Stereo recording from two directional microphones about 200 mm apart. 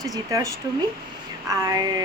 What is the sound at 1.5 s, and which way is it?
Speech, 20° right (ahead or behind).